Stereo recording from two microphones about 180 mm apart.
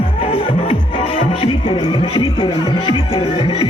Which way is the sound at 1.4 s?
30° left (ahead or behind).